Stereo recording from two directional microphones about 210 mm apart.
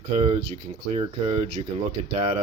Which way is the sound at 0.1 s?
35° right (ahead or behind).